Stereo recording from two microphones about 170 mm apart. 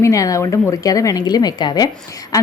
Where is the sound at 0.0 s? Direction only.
20° left (ahead or behind).